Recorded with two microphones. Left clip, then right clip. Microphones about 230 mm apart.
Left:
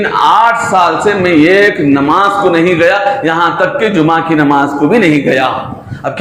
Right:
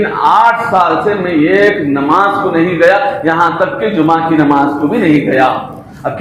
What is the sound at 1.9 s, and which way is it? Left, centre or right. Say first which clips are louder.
A man's voice: left 1 dB; left.